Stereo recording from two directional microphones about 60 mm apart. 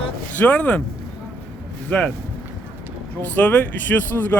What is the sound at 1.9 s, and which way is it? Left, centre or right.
Speech, left.